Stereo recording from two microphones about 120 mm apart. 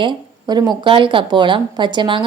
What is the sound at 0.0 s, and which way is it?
A woman's voice, 35° right (ahead or behind).